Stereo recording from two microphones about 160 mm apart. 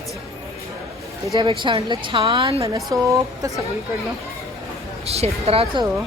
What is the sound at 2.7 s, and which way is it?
Speech, 20° right (ahead or behind).